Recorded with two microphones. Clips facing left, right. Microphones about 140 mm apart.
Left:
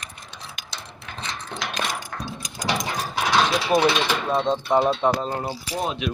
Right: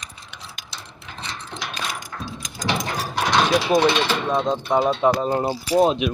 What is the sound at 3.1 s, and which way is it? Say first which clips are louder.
Speech: right 2 dB; 5° left (ahead or behind).